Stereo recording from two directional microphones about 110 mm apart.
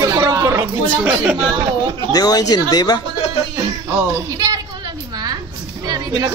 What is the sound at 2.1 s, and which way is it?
Speech, 35° left (ahead or behind).